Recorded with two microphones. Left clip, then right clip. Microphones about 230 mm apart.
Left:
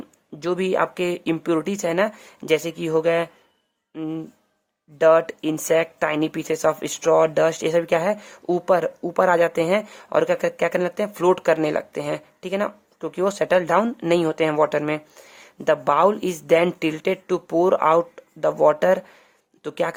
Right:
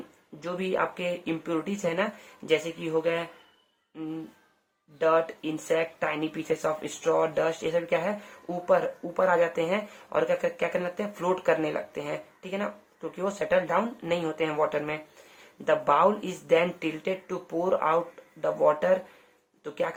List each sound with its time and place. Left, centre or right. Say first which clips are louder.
0.3 s speech: left 7 dB; left